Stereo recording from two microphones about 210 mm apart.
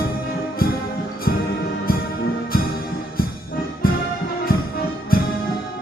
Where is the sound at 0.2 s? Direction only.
45° left (ahead or behind).